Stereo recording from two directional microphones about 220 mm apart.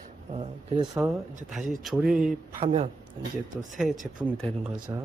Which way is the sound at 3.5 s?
Centre (ahead or behind).